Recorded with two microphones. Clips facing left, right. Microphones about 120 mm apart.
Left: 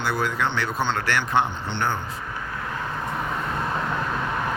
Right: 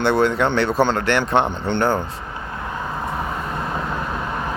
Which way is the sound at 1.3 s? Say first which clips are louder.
Right 4 dB; 65° right (ahead or behind).